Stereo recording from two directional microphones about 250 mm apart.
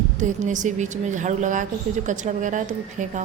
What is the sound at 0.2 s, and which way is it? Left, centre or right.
A woman's voice, right.